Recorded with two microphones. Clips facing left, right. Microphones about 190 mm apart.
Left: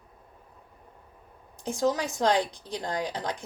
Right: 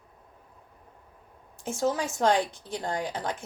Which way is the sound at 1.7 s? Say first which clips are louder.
Left 1 dB; 15° left (ahead or behind).